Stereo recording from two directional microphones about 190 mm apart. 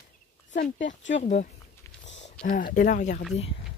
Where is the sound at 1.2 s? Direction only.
35° left (ahead or behind).